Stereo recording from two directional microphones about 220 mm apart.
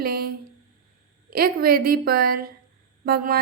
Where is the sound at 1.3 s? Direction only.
40° right (ahead or behind).